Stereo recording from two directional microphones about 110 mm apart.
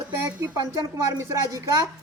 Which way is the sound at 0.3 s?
25° right (ahead or behind).